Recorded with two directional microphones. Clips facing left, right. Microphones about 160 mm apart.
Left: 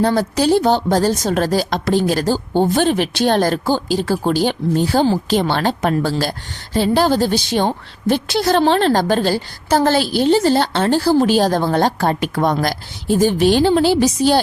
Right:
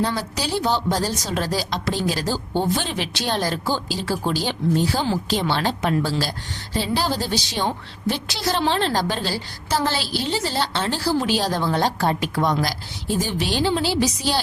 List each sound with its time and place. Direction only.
0.0 s a woman's voice: 50° left (ahead or behind)